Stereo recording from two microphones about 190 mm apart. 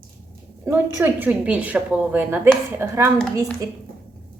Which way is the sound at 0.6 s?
10° right (ahead or behind).